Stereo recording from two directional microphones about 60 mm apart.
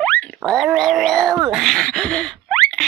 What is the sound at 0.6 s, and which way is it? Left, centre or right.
Cat, centre.